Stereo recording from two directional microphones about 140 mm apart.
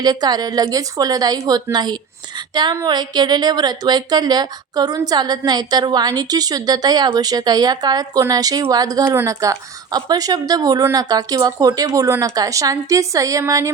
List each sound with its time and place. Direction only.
0.0 s a woman's voice: 30° right (ahead or behind)